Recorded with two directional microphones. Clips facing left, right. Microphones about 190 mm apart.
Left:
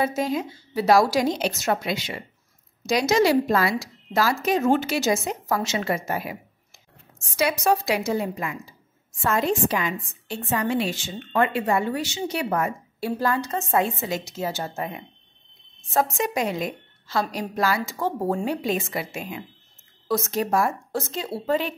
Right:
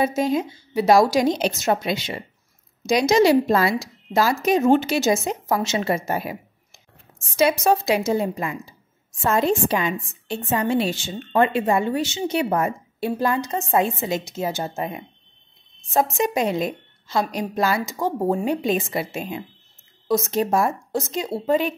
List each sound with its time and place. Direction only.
0.0 s a woman's voice: 20° right (ahead or behind)
7.3 s a woman's voice: 25° right (ahead or behind)